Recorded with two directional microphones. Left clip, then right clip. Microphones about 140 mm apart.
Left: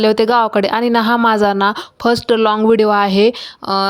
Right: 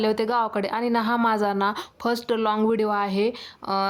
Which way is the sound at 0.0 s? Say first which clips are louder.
Left 10 dB; 45° left (ahead or behind).